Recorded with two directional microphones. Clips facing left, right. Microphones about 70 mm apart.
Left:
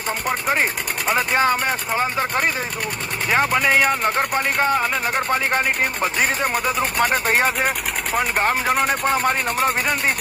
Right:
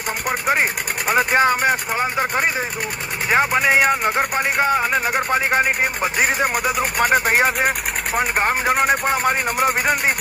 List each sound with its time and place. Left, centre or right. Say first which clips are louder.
0.3 s speech: right 2 dB; centre